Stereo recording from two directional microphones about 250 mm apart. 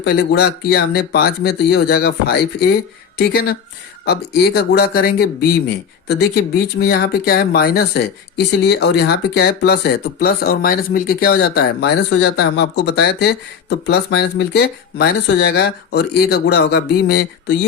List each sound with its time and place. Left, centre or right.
0.0 s speech: left